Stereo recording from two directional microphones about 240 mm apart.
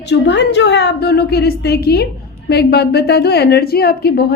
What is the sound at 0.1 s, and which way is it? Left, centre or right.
A woman's voice, left.